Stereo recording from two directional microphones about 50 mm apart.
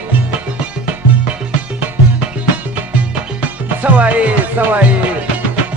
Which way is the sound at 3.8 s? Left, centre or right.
Right.